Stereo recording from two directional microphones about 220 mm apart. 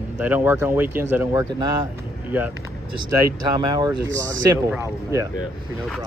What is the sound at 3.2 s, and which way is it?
Speech, 20° right (ahead or behind).